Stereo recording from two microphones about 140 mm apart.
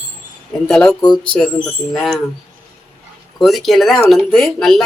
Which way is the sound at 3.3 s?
Centre (ahead or behind).